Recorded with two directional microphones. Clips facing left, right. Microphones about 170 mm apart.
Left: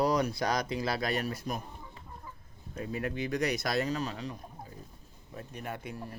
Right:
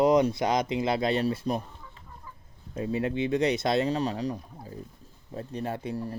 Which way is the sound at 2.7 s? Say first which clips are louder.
Right 6 dB; 25° right (ahead or behind).